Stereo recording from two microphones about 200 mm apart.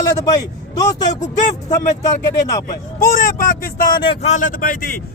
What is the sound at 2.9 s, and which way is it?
Speech, 45° left (ahead or behind).